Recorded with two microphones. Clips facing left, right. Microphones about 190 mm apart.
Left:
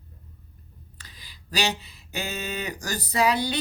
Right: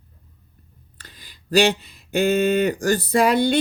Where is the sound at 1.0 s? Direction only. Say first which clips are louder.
Right 5 dB; 50° right (ahead or behind).